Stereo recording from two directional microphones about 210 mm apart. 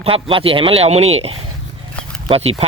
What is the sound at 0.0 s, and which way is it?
Speech, 25° right (ahead or behind).